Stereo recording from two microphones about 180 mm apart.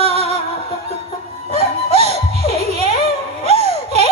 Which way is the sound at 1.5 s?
35° right (ahead or behind).